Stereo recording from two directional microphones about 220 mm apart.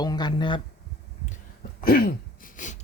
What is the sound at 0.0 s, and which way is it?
Speech, 20° left (ahead or behind).